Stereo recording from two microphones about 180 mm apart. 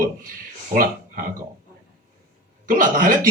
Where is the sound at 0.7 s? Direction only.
50° right (ahead or behind).